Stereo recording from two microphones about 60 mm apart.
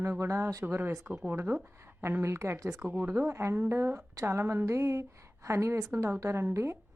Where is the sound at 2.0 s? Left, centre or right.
Right.